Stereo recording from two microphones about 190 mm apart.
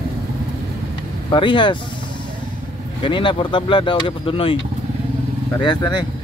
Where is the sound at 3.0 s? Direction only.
25° left (ahead or behind).